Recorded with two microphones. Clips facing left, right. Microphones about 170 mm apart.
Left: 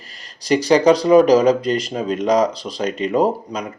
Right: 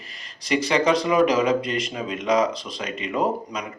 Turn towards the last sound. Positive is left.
turn(degrees=35)  # may be behind; listen again after turning